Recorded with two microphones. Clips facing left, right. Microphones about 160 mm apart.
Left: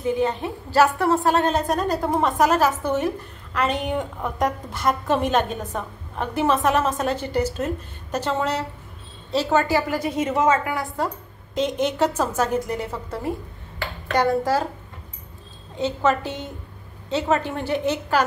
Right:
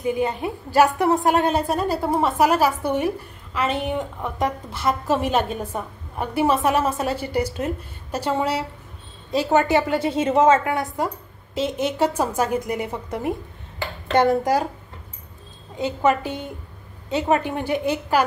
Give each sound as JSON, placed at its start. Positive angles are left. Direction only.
{"t": 0.0, "sound": "a woman's voice", "side_deg": -10}
{"t": 11.5, "sound": "a woman's voice", "side_deg": -5}
{"t": 15.8, "sound": "a woman's voice", "side_deg": -15}